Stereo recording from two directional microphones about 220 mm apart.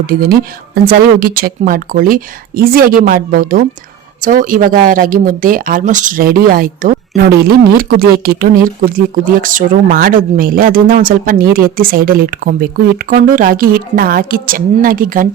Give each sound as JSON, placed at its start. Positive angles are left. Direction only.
{"t": 0.1, "sound": "speech", "side_deg": -40}